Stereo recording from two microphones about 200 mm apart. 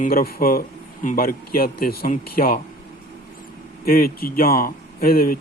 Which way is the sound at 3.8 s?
45° left (ahead or behind).